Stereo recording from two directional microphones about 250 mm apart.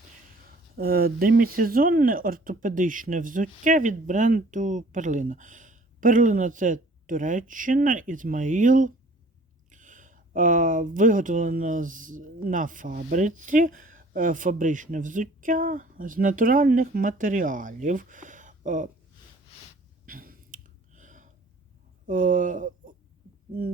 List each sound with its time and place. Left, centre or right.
0.8 s speech: right
20.1 s a sound: right
22.0 s speech: right